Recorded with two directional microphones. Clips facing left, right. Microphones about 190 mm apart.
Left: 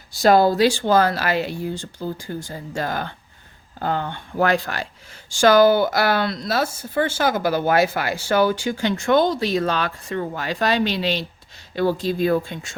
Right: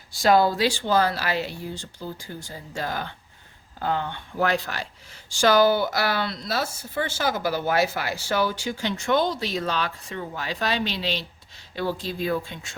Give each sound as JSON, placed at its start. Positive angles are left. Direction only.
{"t": 0.1, "sound": "speech", "side_deg": 40}